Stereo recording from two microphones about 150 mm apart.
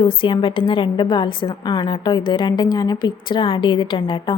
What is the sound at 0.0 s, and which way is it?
A woman's voice, 35° left (ahead or behind).